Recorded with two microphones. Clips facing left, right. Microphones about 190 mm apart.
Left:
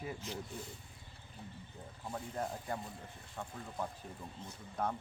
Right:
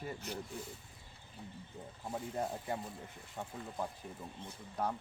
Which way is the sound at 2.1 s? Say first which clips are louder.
Right 2 dB; 20° right (ahead or behind).